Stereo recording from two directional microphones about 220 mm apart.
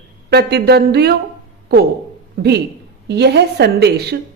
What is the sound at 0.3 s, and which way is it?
Speech, 45° right (ahead or behind).